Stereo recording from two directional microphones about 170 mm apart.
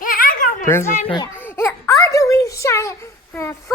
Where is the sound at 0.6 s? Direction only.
15° left (ahead or behind).